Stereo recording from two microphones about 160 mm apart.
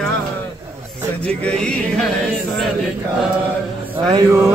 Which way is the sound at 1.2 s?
5° left (ahead or behind).